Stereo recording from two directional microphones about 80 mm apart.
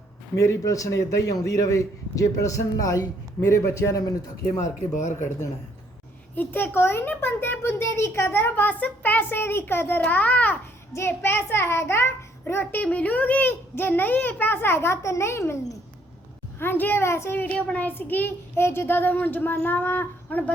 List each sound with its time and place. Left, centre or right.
0.3 s a man's voice: left
6.3 s a child's voice: left
10.9 s a child's voice: left
12.8 s a child's voice: centre; by 15.8 s left
16.6 s a child's voice: left